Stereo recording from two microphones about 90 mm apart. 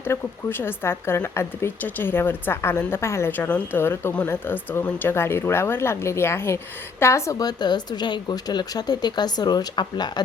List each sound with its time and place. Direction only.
0.0 s a woman's voice: 25° left (ahead or behind); by 10.1 s 50° left (ahead or behind)